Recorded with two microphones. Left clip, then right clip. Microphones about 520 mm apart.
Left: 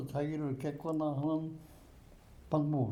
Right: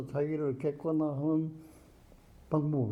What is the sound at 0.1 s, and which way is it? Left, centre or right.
Speech, right.